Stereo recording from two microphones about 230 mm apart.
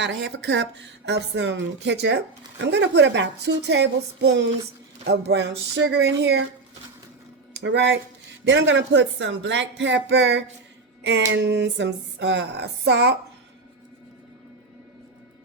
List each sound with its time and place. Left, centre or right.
0.0 s speech: right
7.5 s speech: right